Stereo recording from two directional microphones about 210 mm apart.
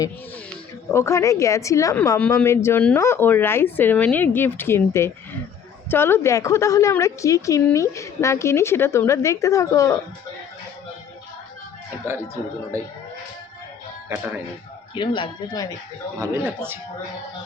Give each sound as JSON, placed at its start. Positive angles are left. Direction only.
{"t": 0.9, "sound": "a woman's voice", "side_deg": 15}
{"t": 12.7, "sound": "speech", "side_deg": -15}
{"t": 14.1, "sound": "speech", "side_deg": -10}
{"t": 14.9, "sound": "speech", "side_deg": 25}
{"t": 16.2, "sound": "speech", "side_deg": -10}